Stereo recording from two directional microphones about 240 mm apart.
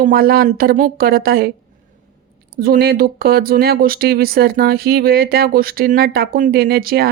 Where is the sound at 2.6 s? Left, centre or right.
Right.